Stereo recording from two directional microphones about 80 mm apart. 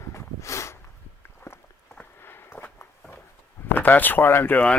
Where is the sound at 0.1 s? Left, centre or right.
Left.